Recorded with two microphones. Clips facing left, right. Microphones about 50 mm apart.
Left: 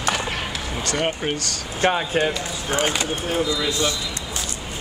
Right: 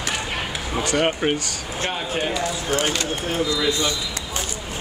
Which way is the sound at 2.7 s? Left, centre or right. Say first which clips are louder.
Left 2 dB; centre.